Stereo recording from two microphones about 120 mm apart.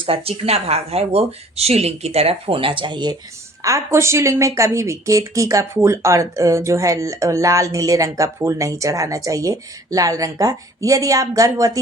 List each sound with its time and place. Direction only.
0.0 s speech: 55° right (ahead or behind)
3.6 s speech: 25° right (ahead or behind)